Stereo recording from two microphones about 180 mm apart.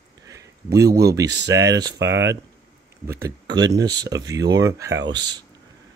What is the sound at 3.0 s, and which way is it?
Speech, 15° right (ahead or behind).